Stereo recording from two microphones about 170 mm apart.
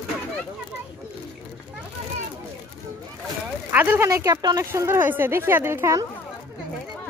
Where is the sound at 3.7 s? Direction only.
10° right (ahead or behind).